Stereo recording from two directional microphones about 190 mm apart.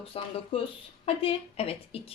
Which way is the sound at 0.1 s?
30° left (ahead or behind).